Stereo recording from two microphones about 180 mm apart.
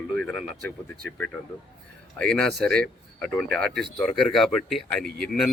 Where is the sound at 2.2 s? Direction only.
5° left (ahead or behind).